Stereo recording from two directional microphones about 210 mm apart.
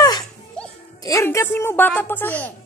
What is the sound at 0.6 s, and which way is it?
Music, 5° left (ahead or behind).